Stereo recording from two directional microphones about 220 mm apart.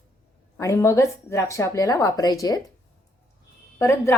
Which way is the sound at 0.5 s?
15° left (ahead or behind).